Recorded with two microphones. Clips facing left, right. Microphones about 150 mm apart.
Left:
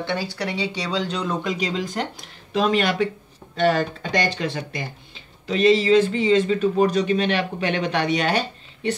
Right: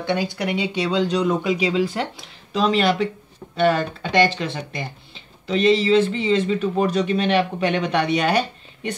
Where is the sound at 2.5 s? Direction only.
45° left (ahead or behind).